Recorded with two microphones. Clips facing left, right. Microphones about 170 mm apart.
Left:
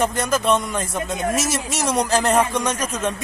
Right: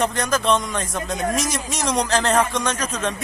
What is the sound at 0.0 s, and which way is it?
A man's voice, 5° left (ahead or behind).